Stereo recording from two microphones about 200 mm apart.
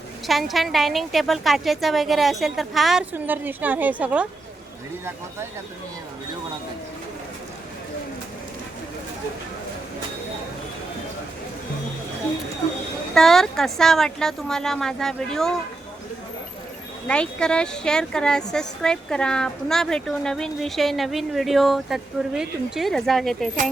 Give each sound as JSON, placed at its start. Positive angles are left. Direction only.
{"t": 0.3, "sound": "speech", "side_deg": 0}
{"t": 13.1, "sound": "speech", "side_deg": 0}
{"t": 17.1, "sound": "speech", "side_deg": 5}